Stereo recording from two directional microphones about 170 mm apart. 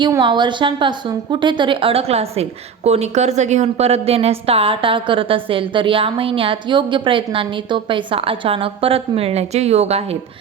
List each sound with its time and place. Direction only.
0.0 s a woman's voice: 25° right (ahead or behind)